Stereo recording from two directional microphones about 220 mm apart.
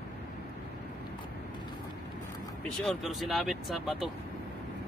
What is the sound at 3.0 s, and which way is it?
Speech, centre (ahead or behind).